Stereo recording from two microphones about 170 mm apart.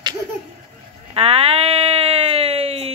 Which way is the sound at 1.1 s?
35° right (ahead or behind).